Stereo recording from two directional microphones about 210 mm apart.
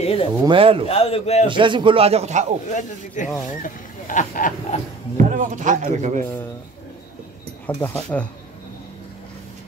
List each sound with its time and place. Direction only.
0.0 s a man's voice: 25° left (ahead or behind)
0.5 s speech: 25° right (ahead or behind)
0.8 s a man's voice: 30° left (ahead or behind)
1.5 s speech: 25° right (ahead or behind)
3.2 s speech: 35° left (ahead or behind)
5.1 s a man's voice: 35° right (ahead or behind)
7.6 s speech: 5° left (ahead or behind)